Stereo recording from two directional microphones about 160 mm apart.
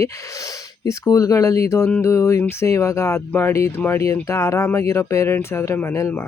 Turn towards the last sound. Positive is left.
turn(degrees=15)  # may be behind; listen again after turning